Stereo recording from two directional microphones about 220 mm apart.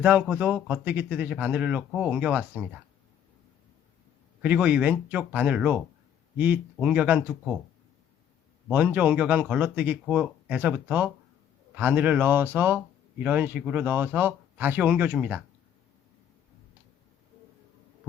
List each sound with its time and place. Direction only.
0.0 s speech: 5° right (ahead or behind)
4.4 s speech: 5° right (ahead or behind)
8.6 s speech: 5° right (ahead or behind)